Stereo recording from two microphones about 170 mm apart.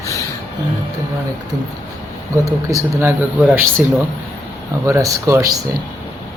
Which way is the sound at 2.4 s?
20° right (ahead or behind).